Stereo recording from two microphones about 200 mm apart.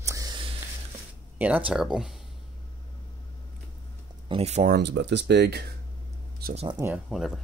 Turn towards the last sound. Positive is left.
turn(degrees=0)  # may be behind; listen again after turning